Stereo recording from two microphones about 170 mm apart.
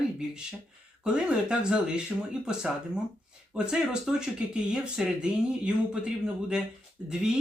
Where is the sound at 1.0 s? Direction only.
5° right (ahead or behind).